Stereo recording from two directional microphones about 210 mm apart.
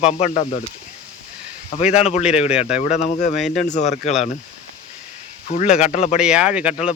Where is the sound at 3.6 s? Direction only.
35° left (ahead or behind).